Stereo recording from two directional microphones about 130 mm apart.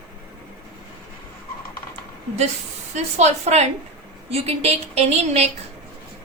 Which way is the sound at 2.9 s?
60° right (ahead or behind).